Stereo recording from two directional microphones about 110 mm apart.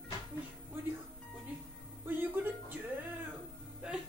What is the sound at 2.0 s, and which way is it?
Music, 15° right (ahead or behind).